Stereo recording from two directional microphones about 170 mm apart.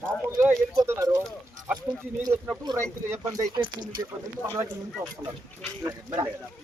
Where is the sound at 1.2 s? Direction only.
5° right (ahead or behind).